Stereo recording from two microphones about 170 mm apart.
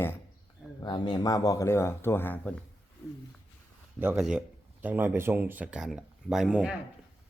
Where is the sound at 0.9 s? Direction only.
25° left (ahead or behind); by 2.6 s 5° left (ahead or behind).